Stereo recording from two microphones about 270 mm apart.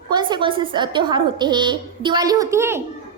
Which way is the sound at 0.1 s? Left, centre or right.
Centre.